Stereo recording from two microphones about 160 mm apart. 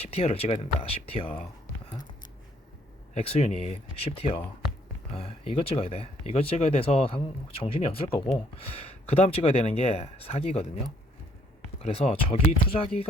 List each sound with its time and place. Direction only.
0.0 s speech: 40° left (ahead or behind)
3.2 s speech: 40° left (ahead or behind)
11.8 s speech: 40° left (ahead or behind)